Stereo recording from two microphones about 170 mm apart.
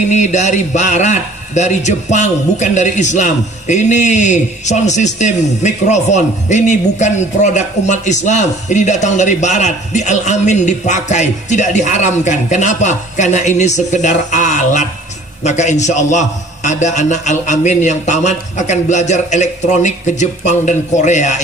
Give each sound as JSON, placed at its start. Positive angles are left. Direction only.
{"t": 0.1, "sound": "a man's voice", "side_deg": 45}